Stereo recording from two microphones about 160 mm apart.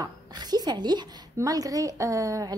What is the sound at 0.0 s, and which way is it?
A woman's voice, 25° right (ahead or behind).